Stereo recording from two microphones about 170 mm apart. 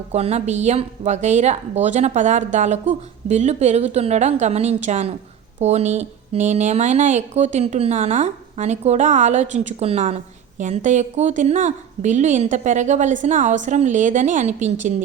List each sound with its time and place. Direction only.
0.1 s a woman's voice: 40° right (ahead or behind)